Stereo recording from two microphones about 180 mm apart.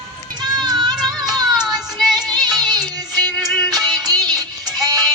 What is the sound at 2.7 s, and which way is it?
Music, 20° right (ahead or behind).